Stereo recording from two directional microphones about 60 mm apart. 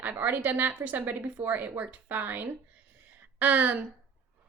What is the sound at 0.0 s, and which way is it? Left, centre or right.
A woman's voice, right.